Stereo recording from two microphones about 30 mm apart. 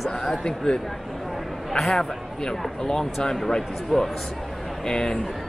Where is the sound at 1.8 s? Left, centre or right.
Centre.